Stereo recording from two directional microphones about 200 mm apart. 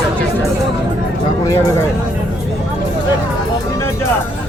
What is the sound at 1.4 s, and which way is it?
Speech, 15° left (ahead or behind).